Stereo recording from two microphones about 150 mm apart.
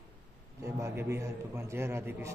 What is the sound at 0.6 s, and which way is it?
A man's voice, 20° right (ahead or behind).